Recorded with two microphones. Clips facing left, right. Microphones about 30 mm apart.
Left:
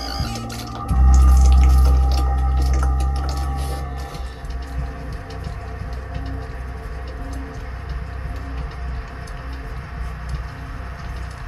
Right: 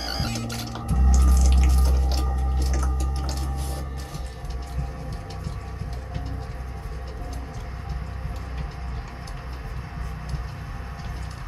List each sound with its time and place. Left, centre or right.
0.0 s music: centre
0.8 s music: left
1.1 s drip: centre
2.2 s a sound: left
3.4 s squish: left